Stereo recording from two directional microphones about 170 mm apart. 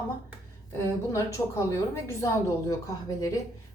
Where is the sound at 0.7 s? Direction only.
15° left (ahead or behind).